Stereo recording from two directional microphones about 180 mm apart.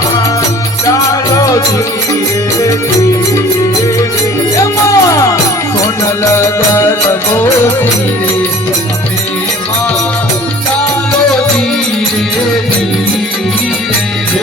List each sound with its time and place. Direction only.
1.4 s music: 20° left (ahead or behind)
4.5 s music: 20° left (ahead or behind)
6.3 s music: 15° left (ahead or behind)